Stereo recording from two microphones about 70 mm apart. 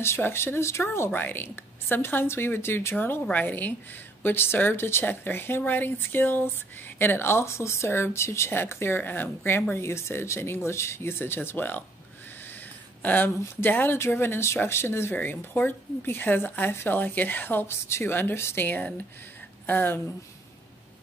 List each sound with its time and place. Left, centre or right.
0.0 s speech: left
3.3 s speech: left
13.0 s speech: left
15.1 s speech: left
18.6 s speech: left